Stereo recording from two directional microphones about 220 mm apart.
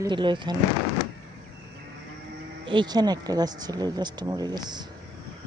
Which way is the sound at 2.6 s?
20° right (ahead or behind).